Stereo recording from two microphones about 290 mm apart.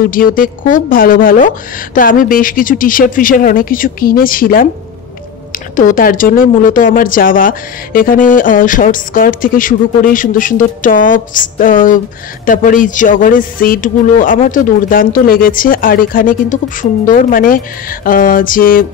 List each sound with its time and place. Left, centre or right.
0.1 s speech: left